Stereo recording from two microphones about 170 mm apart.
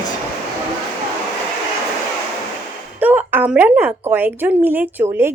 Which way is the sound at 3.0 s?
10° right (ahead or behind).